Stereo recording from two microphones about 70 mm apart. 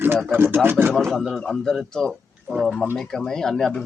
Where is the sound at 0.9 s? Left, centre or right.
Centre.